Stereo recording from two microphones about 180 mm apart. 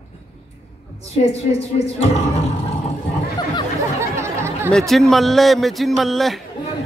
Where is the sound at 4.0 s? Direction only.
15° right (ahead or behind).